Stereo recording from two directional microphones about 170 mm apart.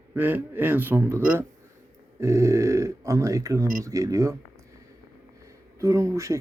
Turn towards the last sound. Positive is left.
turn(degrees=-15)  # may be behind; listen again after turning